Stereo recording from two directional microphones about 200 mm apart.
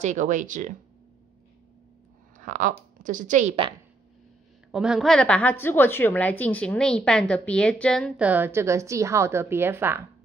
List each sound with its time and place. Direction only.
0.0 s speech: 35° right (ahead or behind)
2.3 s a woman's voice: 40° right (ahead or behind)
4.6 s a woman's voice: 5° right (ahead or behind)
8.2 s a woman's voice: 10° right (ahead or behind)